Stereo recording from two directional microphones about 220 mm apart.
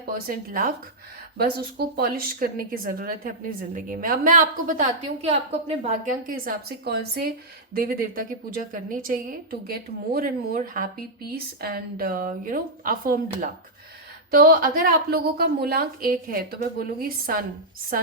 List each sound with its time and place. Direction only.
0.0 s a woman's voice: 40° right (ahead or behind)
6.1 s a woman's voice: 40° right (ahead or behind)